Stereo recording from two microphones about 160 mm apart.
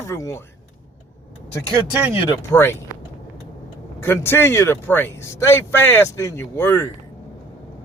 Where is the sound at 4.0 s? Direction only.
15° left (ahead or behind).